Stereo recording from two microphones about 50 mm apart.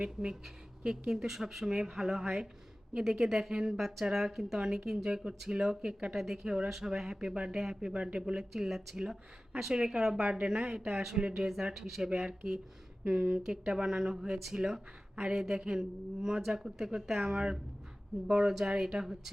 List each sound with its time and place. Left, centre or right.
0.0 s speech: right
1.3 s speech: centre
3.8 s speech: centre
8.4 s speech: centre
11.8 s speech: centre
13.2 s speech: right
13.7 s speech: centre